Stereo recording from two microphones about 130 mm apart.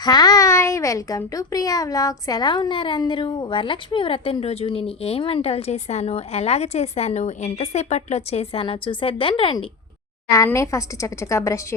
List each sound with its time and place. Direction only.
0.0 s a child's voice: 30° left (ahead or behind)
10.2 s a woman's voice: 25° left (ahead or behind)